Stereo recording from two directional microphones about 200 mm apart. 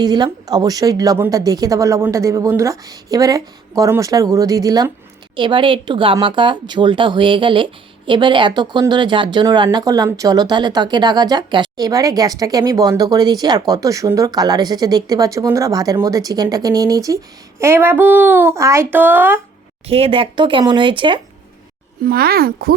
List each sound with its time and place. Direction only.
0.0 s speech: 20° right (ahead or behind)
19.9 s speech: 30° right (ahead or behind)
22.0 s a child's voice: 50° right (ahead or behind)